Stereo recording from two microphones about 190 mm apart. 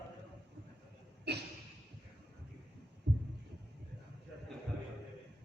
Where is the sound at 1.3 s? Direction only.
60° right (ahead or behind).